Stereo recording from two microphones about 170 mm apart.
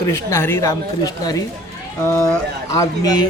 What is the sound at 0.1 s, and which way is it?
Speech, 15° left (ahead or behind).